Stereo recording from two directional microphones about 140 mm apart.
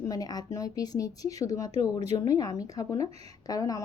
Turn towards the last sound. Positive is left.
turn(degrees=25)  # may be behind; listen again after turning